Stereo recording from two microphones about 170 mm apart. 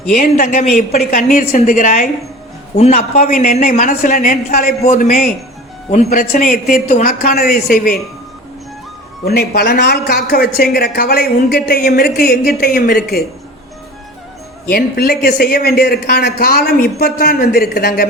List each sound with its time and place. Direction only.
0.1 s a woman's voice: 55° left (ahead or behind)
2.7 s a woman's voice: 40° left (ahead or behind); by 5.3 s 55° left (ahead or behind)
5.9 s speech: 40° left (ahead or behind)
6.3 s speech: 55° left (ahead or behind)
9.2 s speech: 70° left (ahead or behind)
14.7 s speech: 65° left (ahead or behind)